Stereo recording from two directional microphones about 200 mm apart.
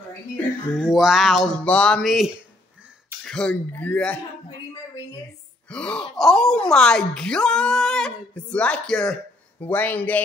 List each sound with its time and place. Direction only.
0.7 s speech: centre (ahead or behind)
5.7 s speech: 5° left (ahead or behind)